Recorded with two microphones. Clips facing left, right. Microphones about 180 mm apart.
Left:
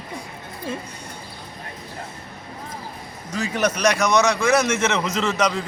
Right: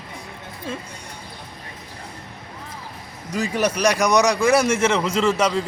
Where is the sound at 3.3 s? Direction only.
10° right (ahead or behind).